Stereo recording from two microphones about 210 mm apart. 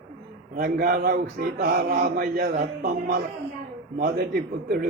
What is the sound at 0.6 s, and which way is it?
A man's voice, 45° right (ahead or behind).